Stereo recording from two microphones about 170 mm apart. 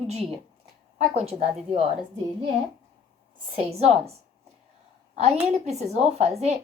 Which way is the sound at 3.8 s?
35° right (ahead or behind).